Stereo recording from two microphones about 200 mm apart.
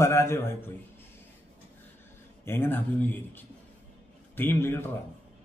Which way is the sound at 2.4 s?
10° left (ahead or behind).